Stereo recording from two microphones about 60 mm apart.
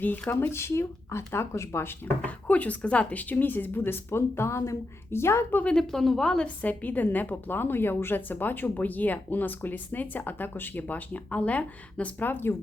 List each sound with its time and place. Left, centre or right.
0.0 s a woman's voice: left
0.5 s speech: left
2.2 s a woman's voice: left
5.6 s a woman's voice: centre
6.6 s a woman's voice: left